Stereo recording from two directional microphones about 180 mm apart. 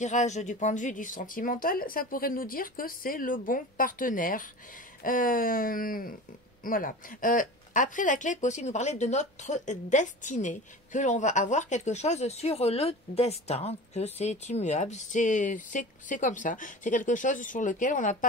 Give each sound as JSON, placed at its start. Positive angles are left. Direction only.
{"t": 0.0, "sound": "speech", "side_deg": 40}